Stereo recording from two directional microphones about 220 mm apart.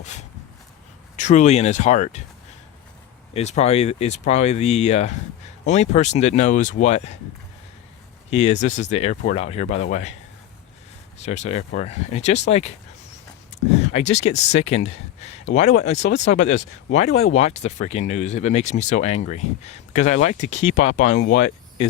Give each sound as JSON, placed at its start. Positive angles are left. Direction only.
{"t": 1.1, "sound": "speech", "side_deg": 35}
{"t": 3.3, "sound": "speech", "side_deg": 30}
{"t": 8.3, "sound": "speech", "side_deg": 30}
{"t": 11.2, "sound": "speech", "side_deg": 30}